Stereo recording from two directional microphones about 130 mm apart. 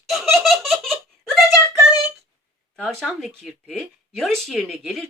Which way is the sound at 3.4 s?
Centre (ahead or behind).